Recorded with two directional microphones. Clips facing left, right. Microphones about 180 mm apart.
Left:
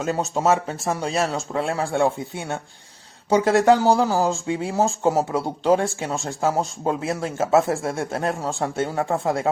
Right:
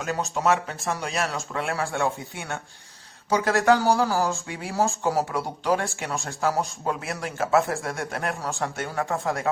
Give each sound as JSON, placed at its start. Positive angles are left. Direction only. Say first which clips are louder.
{"t": 0.0, "sound": "speech", "louder": "left 3 dB", "side_deg": 30}